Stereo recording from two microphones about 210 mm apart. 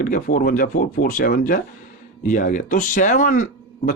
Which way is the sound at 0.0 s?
40° left (ahead or behind).